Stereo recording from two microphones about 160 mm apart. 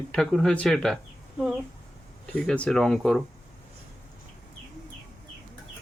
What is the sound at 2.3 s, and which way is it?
Speech, 5° left (ahead or behind).